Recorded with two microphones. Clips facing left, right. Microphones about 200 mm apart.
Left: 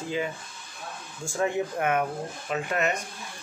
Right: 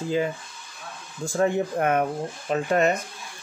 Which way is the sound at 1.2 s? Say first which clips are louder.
Right 4 dB; 35° right (ahead or behind).